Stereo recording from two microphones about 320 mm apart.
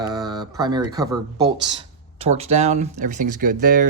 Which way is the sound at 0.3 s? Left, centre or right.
Centre.